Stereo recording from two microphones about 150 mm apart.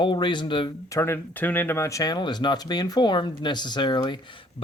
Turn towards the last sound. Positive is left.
turn(degrees=30)  # may be behind; listen again after turning